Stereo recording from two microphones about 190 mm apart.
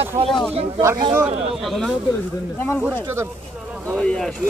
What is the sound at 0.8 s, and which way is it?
Speech, 20° right (ahead or behind).